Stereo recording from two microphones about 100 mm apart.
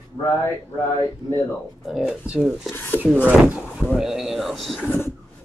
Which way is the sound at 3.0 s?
15° right (ahead or behind).